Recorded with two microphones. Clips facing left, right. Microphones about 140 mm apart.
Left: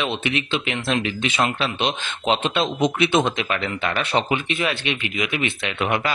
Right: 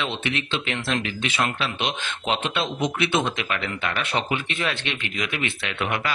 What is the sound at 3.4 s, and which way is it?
Speech, 30° left (ahead or behind).